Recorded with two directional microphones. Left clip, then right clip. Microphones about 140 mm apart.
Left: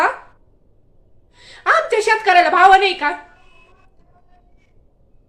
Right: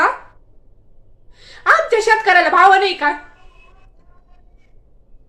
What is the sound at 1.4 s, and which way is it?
Speech, 15° left (ahead or behind).